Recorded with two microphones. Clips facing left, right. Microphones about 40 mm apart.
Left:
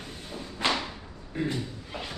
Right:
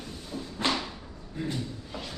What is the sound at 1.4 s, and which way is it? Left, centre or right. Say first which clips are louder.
Speech: left 4 dB; left.